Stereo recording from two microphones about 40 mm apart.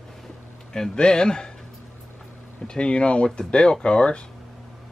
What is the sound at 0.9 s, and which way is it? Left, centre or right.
Speech, left.